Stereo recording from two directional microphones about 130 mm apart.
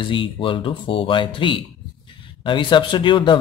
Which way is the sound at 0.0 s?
40° left (ahead or behind).